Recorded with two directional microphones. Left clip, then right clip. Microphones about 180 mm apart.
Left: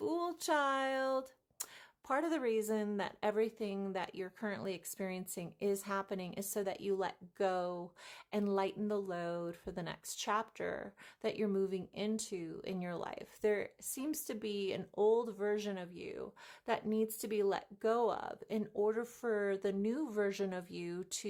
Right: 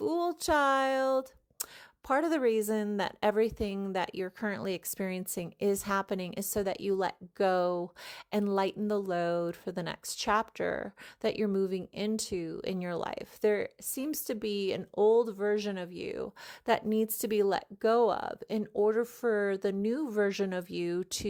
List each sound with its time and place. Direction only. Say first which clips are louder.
0.0 s speech: right 7 dB; 30° right (ahead or behind)